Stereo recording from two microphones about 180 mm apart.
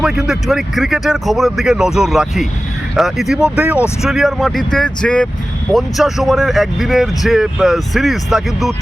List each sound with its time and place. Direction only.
0.0 s speech: centre (ahead or behind)